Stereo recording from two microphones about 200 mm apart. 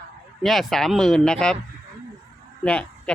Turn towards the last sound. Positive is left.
turn(degrees=5)  # may be behind; listen again after turning